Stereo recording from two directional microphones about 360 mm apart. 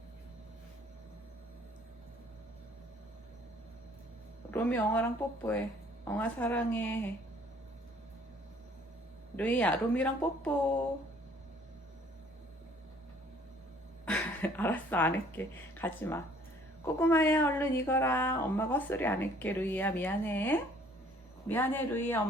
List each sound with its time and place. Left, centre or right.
4.5 s speech: centre
9.3 s speech: centre
14.0 s a sound: centre
15.4 s speech: centre